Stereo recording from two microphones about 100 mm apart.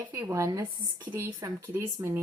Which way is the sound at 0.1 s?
30° right (ahead or behind).